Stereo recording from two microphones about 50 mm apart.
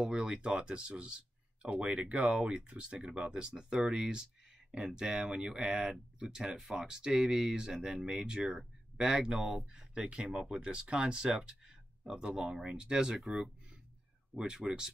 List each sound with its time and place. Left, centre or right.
0.0 s speech: centre
13.2 s speech: centre
14.3 s speech: centre